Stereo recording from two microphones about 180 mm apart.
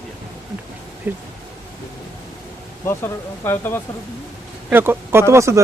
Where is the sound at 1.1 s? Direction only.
10° right (ahead or behind).